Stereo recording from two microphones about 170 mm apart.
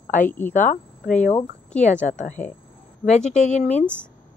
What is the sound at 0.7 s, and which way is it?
Speech, 50° left (ahead or behind).